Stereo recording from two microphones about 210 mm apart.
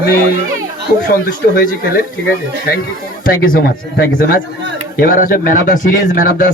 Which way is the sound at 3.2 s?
40° left (ahead or behind).